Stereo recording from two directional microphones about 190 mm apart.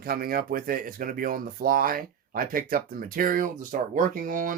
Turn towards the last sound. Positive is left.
turn(degrees=-45)  # may be behind; listen again after turning